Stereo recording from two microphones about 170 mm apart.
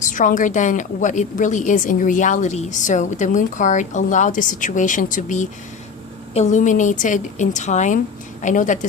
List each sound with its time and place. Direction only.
0.0 s a woman's voice: 50° left (ahead or behind)